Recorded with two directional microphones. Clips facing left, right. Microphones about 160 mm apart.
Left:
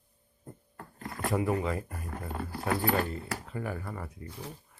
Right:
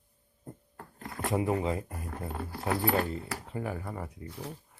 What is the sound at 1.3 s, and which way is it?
Speech, 25° right (ahead or behind).